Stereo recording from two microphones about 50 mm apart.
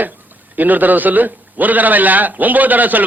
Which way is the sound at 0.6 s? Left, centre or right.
Right.